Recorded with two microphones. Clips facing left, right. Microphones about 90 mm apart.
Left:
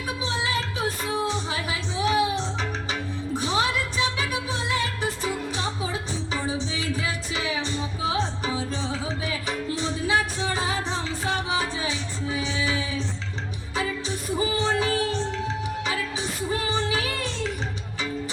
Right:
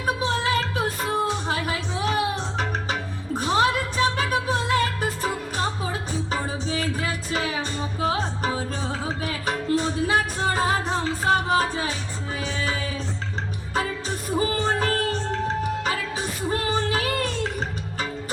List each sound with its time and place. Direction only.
0.0 s music: 50° right (ahead or behind)
13.7 s music: 50° right (ahead or behind)